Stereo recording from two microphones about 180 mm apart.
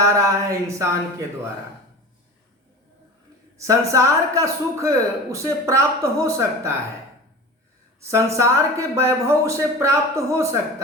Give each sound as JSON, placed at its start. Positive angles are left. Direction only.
{"t": 0.0, "sound": "a sound", "side_deg": -15}
{"t": 3.6, "sound": "a man's voice", "side_deg": -15}
{"t": 8.0, "sound": "a man's voice", "side_deg": -15}